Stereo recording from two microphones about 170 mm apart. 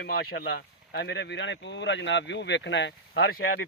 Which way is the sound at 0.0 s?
70° left (ahead or behind).